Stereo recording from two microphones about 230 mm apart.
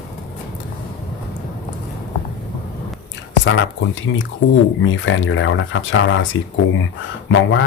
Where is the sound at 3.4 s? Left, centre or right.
Left.